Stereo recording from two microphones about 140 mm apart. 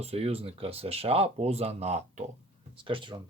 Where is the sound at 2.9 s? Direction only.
40° right (ahead or behind).